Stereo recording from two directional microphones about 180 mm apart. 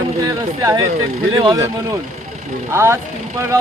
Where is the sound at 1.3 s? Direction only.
25° right (ahead or behind).